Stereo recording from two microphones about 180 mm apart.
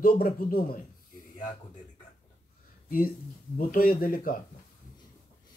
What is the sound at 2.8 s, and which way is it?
A man's voice, 55° left (ahead or behind).